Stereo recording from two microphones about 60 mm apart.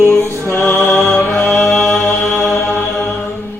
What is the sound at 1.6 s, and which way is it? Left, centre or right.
Mantra, centre.